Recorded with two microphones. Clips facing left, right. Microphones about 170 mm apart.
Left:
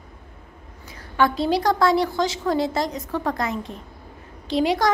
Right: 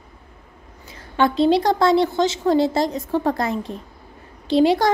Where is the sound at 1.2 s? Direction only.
25° right (ahead or behind).